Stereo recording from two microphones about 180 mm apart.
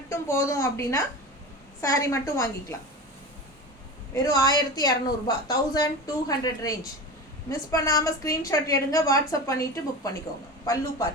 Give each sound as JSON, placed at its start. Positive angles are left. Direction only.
{"t": 0.1, "sound": "a woman's voice", "side_deg": 15}
{"t": 4.1, "sound": "a woman's voice", "side_deg": 20}